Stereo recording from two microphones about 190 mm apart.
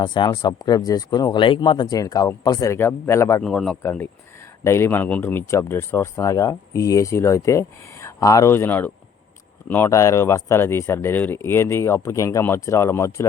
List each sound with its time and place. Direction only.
0.0 s speech: 25° left (ahead or behind)
3.4 s speech: 5° left (ahead or behind)